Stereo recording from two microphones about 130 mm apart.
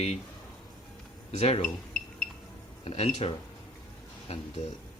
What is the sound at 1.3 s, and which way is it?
Speech, 55° left (ahead or behind).